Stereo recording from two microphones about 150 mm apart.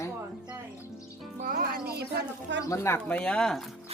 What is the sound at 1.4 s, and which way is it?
Speech, 70° right (ahead or behind).